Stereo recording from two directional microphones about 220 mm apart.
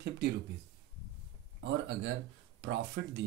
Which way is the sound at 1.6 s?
50° right (ahead or behind).